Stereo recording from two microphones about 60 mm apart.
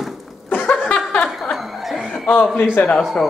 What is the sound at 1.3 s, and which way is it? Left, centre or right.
Chuckle, centre.